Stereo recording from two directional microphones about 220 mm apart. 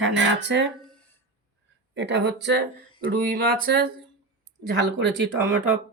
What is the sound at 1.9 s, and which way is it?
Speech, 50° right (ahead or behind).